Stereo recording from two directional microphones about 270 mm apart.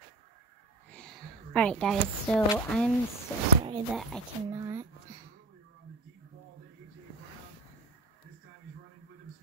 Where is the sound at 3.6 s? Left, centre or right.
Centre.